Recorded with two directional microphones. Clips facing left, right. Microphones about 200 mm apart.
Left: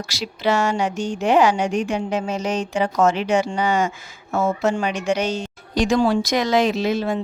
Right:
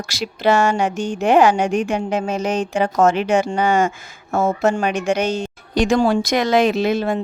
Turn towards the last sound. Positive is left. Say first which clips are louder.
# right 3 dB
turn(degrees=-55)  # may be behind; listen again after turning